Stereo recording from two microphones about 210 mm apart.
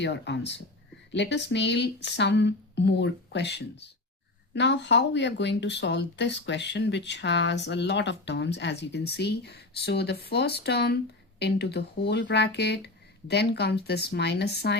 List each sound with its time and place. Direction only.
0.0 s speech: 55° left (ahead or behind)